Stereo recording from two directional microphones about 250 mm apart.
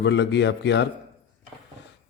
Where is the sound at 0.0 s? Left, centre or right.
Left.